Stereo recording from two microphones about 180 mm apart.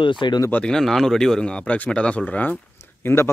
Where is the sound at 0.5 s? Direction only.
5° left (ahead or behind).